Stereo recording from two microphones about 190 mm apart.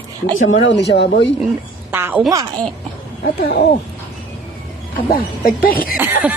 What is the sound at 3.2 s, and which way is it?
Speech, 60° left (ahead or behind).